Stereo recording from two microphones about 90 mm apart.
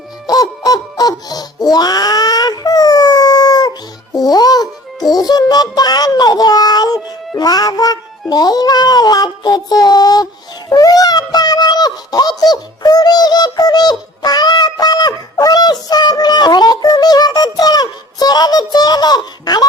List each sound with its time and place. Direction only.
0.3 s music: 45° left (ahead or behind)
8.3 s child singing: 50° left (ahead or behind)
10.7 s a sound: 45° left (ahead or behind)